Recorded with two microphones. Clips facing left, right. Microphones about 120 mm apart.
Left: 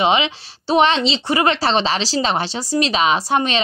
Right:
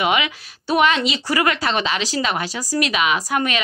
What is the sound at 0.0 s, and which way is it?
A woman's voice, 25° left (ahead or behind).